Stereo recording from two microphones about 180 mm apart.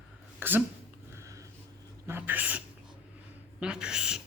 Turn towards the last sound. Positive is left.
turn(degrees=-5)  # may be behind; listen again after turning